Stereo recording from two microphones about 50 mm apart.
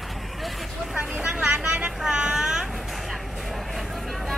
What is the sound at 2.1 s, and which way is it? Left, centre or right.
Vehicle, centre.